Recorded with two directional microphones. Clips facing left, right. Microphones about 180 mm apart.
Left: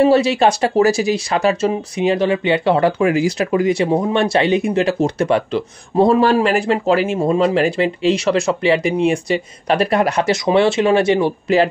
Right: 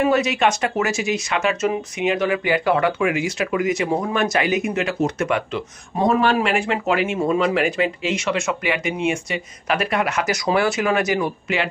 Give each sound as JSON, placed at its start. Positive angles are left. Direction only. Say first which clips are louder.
{"t": 0.0, "sound": "speech", "louder": "left 6 dB", "side_deg": 30}